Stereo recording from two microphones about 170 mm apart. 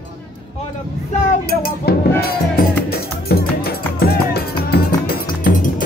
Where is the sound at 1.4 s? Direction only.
60° left (ahead or behind).